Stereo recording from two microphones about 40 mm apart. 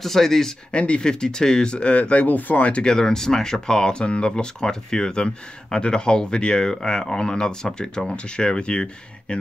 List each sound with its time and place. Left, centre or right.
0.0 s speech: centre
0.7 s speech: left
2.2 s speech: left
2.6 s speech: left
2.9 s speech: centre